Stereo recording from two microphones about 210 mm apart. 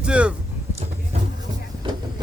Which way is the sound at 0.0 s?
5° right (ahead or behind).